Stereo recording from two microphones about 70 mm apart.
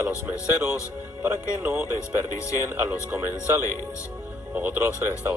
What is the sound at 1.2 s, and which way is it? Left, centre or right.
Speech, right.